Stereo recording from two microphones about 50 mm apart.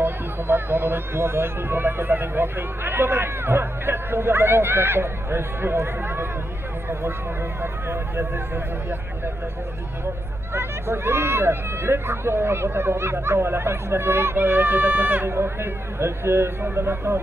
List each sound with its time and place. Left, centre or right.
0.0 s speech: right
10.5 s speech: right
15.4 s speech: right